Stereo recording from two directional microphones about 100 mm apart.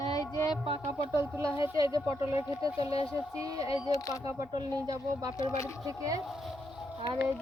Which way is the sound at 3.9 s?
35° left (ahead or behind).